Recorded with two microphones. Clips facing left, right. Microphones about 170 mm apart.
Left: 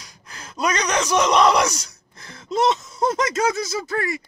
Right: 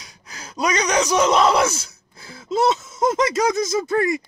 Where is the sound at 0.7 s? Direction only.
10° right (ahead or behind).